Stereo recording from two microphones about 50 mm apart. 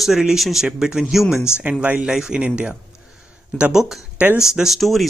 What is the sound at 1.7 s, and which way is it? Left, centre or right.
Speech, right.